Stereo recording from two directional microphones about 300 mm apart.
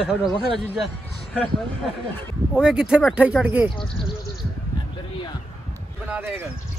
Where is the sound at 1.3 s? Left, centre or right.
Centre.